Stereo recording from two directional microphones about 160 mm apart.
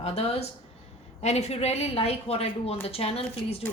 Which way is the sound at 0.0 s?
40° left (ahead or behind).